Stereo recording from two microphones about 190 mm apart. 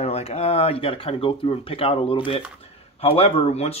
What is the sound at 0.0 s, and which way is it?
Speech, 35° left (ahead or behind).